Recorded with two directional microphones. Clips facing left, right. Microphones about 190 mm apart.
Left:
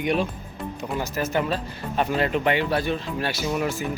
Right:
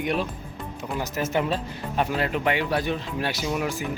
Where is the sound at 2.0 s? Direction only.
5° right (ahead or behind).